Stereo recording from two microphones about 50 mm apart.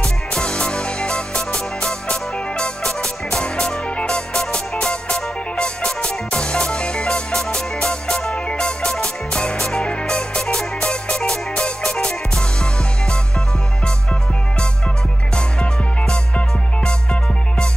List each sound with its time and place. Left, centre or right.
0.0 s music: centre
15.3 s music: left